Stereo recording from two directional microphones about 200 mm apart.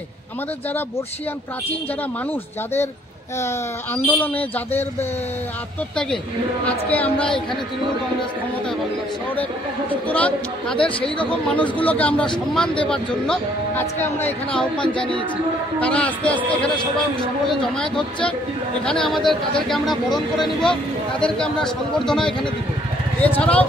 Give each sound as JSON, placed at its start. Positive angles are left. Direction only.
{"t": 3.3, "sound": "speech", "side_deg": 10}
{"t": 6.6, "sound": "speech", "side_deg": 10}
{"t": 7.2, "sound": "speech", "side_deg": 25}
{"t": 9.3, "sound": "speech", "side_deg": 10}
{"t": 10.8, "sound": "speech", "side_deg": 25}
{"t": 11.4, "sound": "speech", "side_deg": 5}
{"t": 17.5, "sound": "speech", "side_deg": 5}